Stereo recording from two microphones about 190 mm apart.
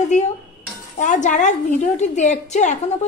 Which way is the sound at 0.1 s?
40° left (ahead or behind).